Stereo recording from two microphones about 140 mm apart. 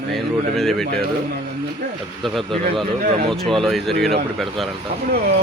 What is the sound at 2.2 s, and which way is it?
Speech, centre (ahead or behind).